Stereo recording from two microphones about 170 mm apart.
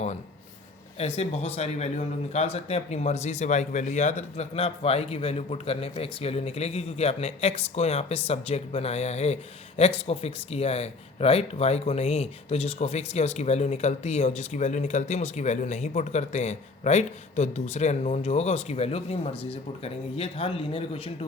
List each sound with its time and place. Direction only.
0.9 s speech: 40° left (ahead or behind)